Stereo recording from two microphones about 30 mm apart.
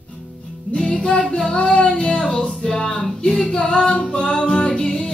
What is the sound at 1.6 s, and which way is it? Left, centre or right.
Child singing, left.